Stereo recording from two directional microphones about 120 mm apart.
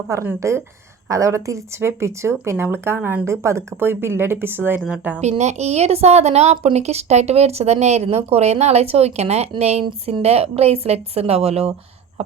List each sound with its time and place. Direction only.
0.1 s speech: 25° right (ahead or behind)
5.4 s speech: 70° right (ahead or behind)